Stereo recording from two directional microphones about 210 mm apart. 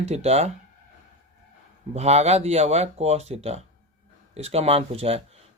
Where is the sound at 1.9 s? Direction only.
30° right (ahead or behind).